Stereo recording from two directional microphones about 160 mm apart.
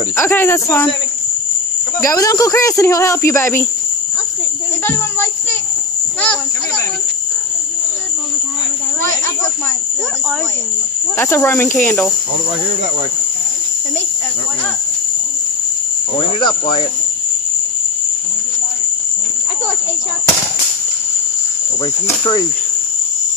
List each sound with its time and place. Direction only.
0.1 s speech: 15° left (ahead or behind)
2.0 s speech: 20° left (ahead or behind)
4.8 s speech: 15° left (ahead or behind)
11.1 s speech: 15° left (ahead or behind)
16.2 s speech: 30° left (ahead or behind)